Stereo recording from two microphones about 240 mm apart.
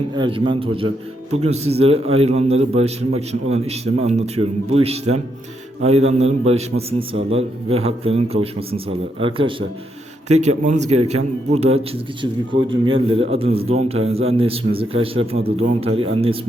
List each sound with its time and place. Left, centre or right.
0.2 s a man's voice: right